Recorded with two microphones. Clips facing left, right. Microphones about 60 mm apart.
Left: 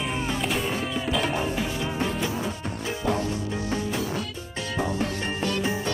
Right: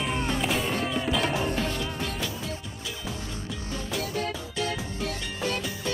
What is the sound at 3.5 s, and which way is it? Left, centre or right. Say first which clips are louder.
Music: left 5 dB; left.